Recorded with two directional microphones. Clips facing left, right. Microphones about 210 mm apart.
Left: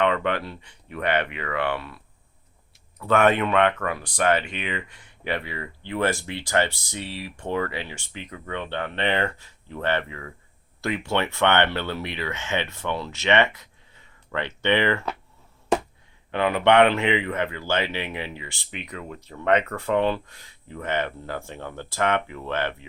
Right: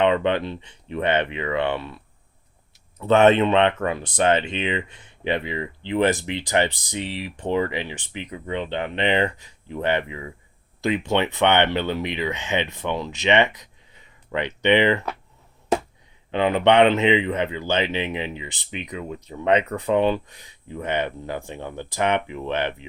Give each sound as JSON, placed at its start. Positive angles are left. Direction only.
{"t": 0.0, "sound": "speech", "side_deg": -20}
{"t": 3.0, "sound": "speech", "side_deg": -25}
{"t": 16.3, "sound": "speech", "side_deg": -20}